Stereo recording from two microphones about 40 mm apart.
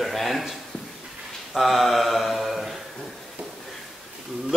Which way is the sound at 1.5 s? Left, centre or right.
Centre.